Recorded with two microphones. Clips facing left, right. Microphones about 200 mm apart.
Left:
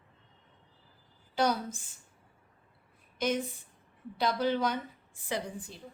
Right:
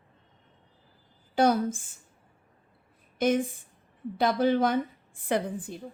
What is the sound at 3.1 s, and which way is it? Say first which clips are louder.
A woman's voice: right 6 dB; 50° right (ahead or behind).